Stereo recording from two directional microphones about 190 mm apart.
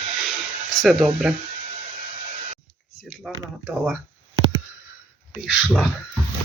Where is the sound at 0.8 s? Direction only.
Centre (ahead or behind).